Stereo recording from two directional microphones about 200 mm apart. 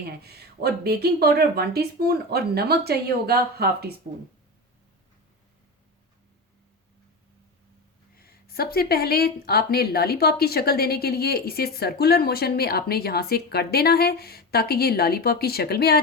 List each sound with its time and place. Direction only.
0.2 s speech: 55° right (ahead or behind)
8.2 s speech: 50° left (ahead or behind)